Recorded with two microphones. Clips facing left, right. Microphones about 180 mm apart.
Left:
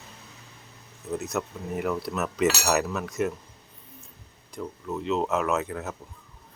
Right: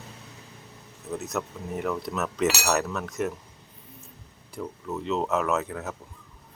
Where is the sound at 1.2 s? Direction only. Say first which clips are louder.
Left 1 dB; centre (ahead or behind).